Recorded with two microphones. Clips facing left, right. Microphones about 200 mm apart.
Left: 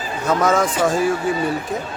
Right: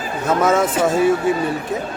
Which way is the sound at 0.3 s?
5° right (ahead or behind).